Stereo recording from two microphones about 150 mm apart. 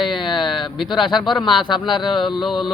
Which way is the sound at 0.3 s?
Centre (ahead or behind).